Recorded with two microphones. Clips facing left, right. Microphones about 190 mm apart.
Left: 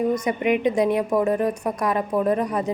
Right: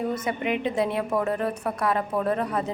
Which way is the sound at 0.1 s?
15° left (ahead or behind).